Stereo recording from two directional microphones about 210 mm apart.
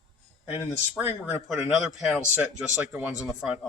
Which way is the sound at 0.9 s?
5° right (ahead or behind).